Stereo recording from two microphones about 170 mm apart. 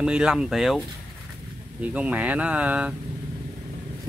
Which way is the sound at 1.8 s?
10° right (ahead or behind).